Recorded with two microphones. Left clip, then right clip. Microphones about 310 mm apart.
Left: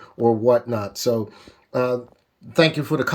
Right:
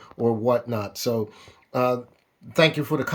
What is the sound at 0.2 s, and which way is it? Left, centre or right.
Speech, centre.